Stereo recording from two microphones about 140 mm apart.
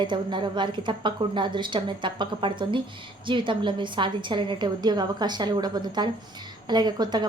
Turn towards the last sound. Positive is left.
turn(degrees=-30)  # may be behind; listen again after turning